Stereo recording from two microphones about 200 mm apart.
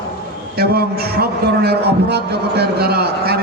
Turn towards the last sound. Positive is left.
turn(degrees=-55)  # may be behind; listen again after turning